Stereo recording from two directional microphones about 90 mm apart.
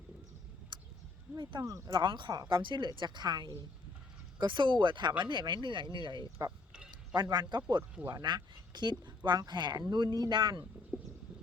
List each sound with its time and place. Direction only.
1.4 s speech: 60° right (ahead or behind)
1.6 s speech: 40° right (ahead or behind)
2.0 s speech: 60° right (ahead or behind)